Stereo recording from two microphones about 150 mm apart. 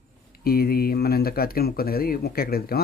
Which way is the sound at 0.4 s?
90° left.